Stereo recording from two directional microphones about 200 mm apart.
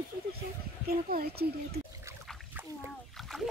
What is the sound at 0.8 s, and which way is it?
Speech, 50° right (ahead or behind).